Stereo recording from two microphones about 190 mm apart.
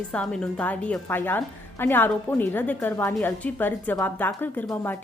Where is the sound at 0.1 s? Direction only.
5° left (ahead or behind).